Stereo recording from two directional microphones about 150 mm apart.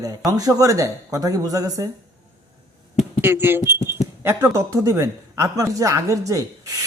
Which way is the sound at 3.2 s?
15° right (ahead or behind).